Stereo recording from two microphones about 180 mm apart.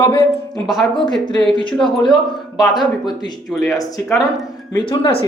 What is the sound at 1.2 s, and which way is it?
Speech, 25° left (ahead or behind).